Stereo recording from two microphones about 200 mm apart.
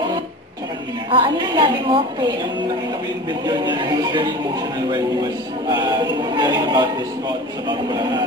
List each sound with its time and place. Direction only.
1.1 s speech: 25° right (ahead or behind)
3.4 s speech: 20° right (ahead or behind)